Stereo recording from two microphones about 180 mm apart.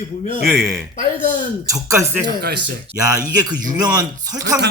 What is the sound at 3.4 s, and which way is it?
Speech, 20° right (ahead or behind).